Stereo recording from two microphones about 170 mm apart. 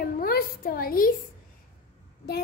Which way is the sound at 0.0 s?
60° left (ahead or behind).